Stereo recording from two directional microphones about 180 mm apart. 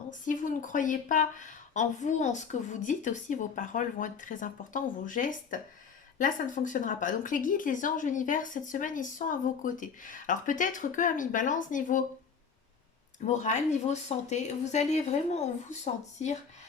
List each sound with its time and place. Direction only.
0.1 s speech: 45° left (ahead or behind)
13.2 s speech: 40° left (ahead or behind)